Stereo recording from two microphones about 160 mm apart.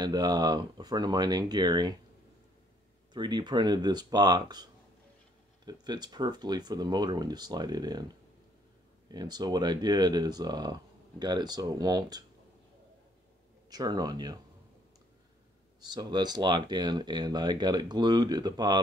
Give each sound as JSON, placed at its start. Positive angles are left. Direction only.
{"t": 0.0, "sound": "speech", "side_deg": -25}
{"t": 3.1, "sound": "speech", "side_deg": -30}
{"t": 5.7, "sound": "speech", "side_deg": -25}
{"t": 9.1, "sound": "speech", "side_deg": -25}
{"t": 13.7, "sound": "speech", "side_deg": -25}
{"t": 15.9, "sound": "speech", "side_deg": -25}